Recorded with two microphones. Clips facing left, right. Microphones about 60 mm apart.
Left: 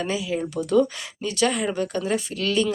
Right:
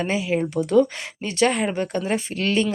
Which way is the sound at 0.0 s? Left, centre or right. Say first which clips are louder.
Right 3 dB; right.